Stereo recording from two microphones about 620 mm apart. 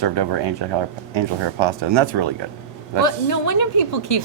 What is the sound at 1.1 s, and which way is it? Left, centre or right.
Speech, right.